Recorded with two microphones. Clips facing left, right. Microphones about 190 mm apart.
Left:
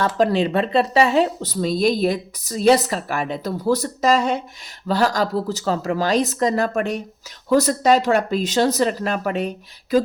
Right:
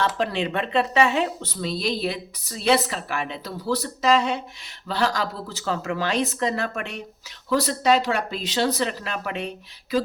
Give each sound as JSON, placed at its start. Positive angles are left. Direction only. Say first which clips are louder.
{"t": 0.0, "sound": "speech", "louder": "left 6 dB", "side_deg": 40}